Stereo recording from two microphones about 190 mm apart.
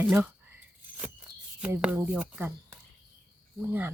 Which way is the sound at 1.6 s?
5° right (ahead or behind).